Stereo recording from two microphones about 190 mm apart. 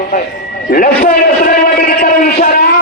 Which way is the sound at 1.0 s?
50° left (ahead or behind).